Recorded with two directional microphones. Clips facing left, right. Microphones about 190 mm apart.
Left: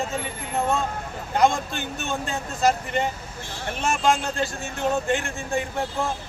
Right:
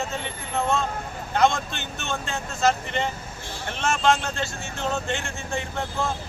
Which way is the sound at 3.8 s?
15° left (ahead or behind).